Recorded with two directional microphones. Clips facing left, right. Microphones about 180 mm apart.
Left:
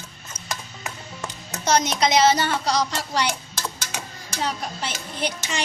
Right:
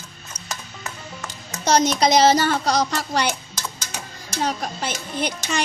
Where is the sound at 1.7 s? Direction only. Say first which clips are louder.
Right 3 dB; 35° right (ahead or behind); by 3.3 s 50° right (ahead or behind).